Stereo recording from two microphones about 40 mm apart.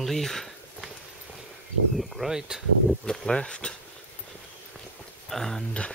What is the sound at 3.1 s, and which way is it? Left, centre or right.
Speech, centre.